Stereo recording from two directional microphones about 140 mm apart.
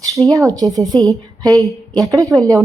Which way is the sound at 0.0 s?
25° right (ahead or behind).